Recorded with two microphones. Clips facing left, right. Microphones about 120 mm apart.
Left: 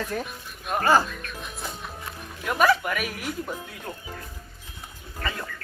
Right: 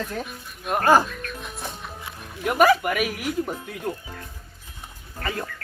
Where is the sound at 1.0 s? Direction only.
Centre (ahead or behind).